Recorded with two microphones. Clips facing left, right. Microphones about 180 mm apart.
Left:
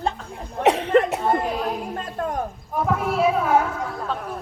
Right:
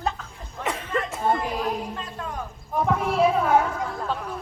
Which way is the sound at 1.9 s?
50° left (ahead or behind).